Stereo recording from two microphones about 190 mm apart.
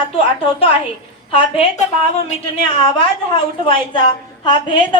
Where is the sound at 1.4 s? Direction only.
35° left (ahead or behind).